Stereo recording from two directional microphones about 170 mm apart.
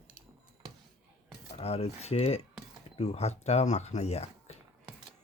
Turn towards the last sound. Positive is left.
turn(degrees=40)  # may be behind; listen again after turning